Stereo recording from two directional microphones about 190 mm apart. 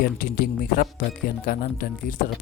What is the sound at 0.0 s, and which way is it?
Speech, 45° left (ahead or behind).